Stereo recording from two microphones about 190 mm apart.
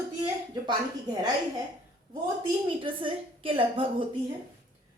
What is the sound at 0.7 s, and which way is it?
Speech, 20° right (ahead or behind).